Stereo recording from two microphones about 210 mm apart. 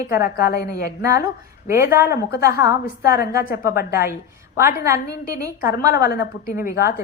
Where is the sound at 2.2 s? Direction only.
50° left (ahead or behind).